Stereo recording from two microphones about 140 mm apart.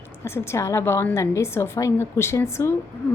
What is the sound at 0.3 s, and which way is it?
A woman's voice, 20° left (ahead or behind).